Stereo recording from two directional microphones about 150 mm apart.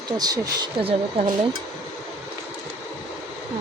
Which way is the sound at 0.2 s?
30° right (ahead or behind).